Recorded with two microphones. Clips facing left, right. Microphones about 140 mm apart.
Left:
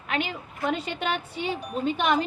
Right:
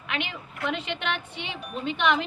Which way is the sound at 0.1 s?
40° left (ahead or behind).